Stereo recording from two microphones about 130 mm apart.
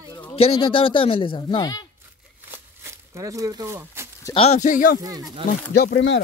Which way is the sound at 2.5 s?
20° right (ahead or behind).